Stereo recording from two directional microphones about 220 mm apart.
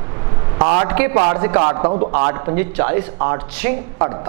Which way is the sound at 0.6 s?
20° right (ahead or behind).